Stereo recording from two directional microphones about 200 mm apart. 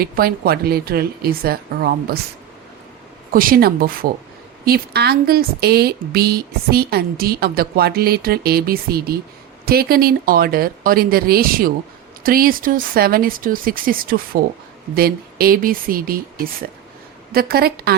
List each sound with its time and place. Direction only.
0.0 s speech: 50° right (ahead or behind)
3.3 s speech: 45° right (ahead or behind)
17.3 s speech: 50° right (ahead or behind)